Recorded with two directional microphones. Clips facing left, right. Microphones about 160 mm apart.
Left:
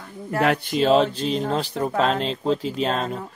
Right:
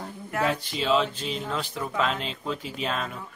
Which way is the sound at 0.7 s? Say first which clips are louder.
Left 8 dB; 40° left (ahead or behind).